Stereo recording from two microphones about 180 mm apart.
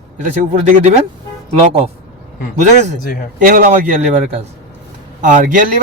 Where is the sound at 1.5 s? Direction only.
30° right (ahead or behind).